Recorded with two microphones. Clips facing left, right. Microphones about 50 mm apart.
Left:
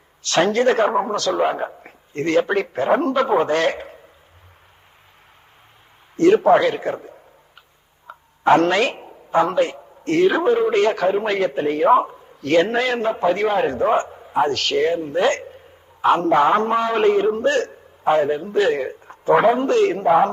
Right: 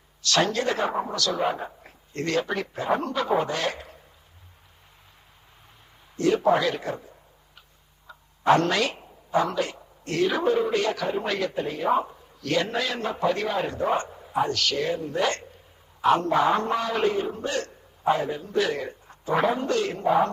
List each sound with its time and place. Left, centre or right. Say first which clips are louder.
0.2 s a man's voice: left 6 dB; left
1.2 s a man's voice: left 6 dB; left
6.1 s a man's voice: left 8 dB; left
8.0 s a sound: left 3 dB; left
9.0 s a man's voice: left 6 dB; left
14.3 s a man's voice: left 6 dB; left
19.0 s a man's voice: left 9 dB; left